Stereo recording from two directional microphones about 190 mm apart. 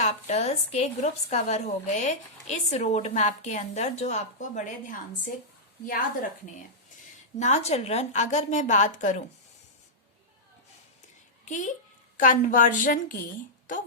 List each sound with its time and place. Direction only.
0.0 s a woman's voice: 35° left (ahead or behind)
7.3 s a woman's voice: 35° left (ahead or behind)
11.4 s a child's voice: 40° left (ahead or behind)